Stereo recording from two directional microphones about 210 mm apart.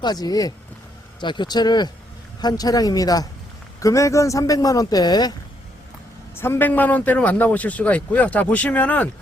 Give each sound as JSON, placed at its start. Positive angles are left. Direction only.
{"t": 0.0, "sound": "a man's voice", "side_deg": 20}
{"t": 6.4, "sound": "a man's voice", "side_deg": 10}